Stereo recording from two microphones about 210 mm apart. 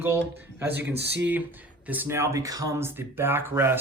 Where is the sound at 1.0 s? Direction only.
55° right (ahead or behind).